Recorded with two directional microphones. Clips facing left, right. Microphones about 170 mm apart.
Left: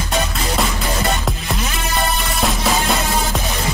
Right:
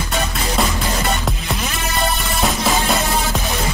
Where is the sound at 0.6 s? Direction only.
Centre (ahead or behind).